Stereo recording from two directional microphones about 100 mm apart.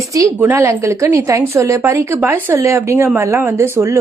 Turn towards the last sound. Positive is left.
turn(degrees=-25)  # may be behind; listen again after turning